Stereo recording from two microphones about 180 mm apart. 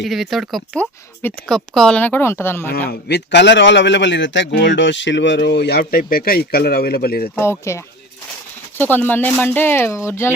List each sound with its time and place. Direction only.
0.0 s speech: centre (ahead or behind)
2.9 s a man's voice: 70° left (ahead or behind)
5.8 s speech: 50° left (ahead or behind)
7.7 s speech: 15° left (ahead or behind)